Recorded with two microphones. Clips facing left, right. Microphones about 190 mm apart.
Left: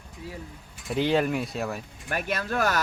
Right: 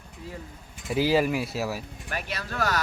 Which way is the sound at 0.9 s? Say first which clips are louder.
Right 1 dB; 5° right (ahead or behind).